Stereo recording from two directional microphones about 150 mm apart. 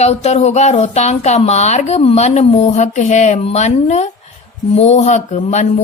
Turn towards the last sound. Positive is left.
turn(degrees=50)  # may be behind; listen again after turning